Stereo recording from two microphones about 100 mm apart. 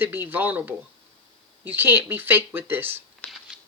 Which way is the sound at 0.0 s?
20° right (ahead or behind).